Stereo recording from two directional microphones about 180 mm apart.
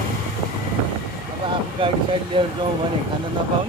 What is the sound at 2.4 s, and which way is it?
Speech, 30° right (ahead or behind).